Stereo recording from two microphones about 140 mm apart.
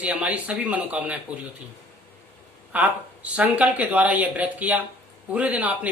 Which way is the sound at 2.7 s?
10° right (ahead or behind).